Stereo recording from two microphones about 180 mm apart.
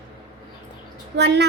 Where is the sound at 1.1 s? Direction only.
70° right (ahead or behind).